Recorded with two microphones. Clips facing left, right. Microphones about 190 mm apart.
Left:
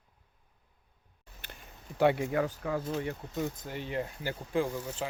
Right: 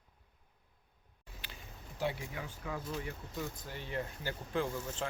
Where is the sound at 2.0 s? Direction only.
70° left (ahead or behind).